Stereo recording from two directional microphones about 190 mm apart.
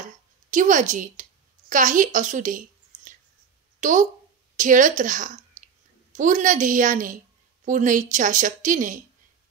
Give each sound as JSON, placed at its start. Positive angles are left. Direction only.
{"t": 0.5, "sound": "a woman's voice", "side_deg": -40}